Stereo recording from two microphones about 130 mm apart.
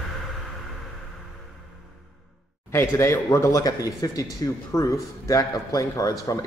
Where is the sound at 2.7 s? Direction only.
20° left (ahead or behind).